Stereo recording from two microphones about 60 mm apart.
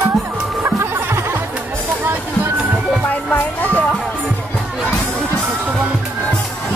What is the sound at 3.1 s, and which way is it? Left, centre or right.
Music, left.